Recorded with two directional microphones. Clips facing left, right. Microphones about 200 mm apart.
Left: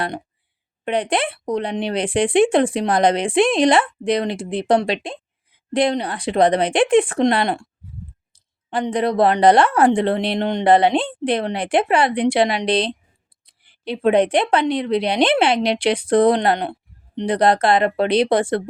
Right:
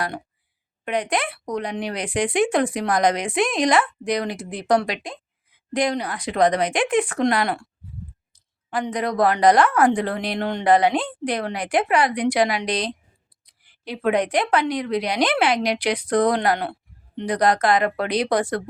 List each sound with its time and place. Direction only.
0.9 s speech: 30° left (ahead or behind)